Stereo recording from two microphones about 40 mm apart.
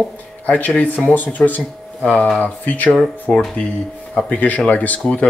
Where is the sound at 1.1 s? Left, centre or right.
Left.